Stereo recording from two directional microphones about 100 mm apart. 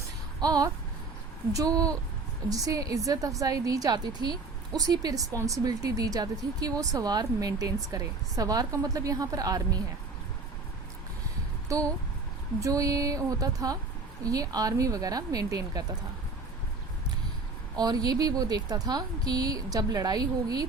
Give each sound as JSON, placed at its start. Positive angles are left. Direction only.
{"t": 0.3, "sound": "speech", "side_deg": -40}
{"t": 11.7, "sound": "speech", "side_deg": -35}
{"t": 17.7, "sound": "speech", "side_deg": -40}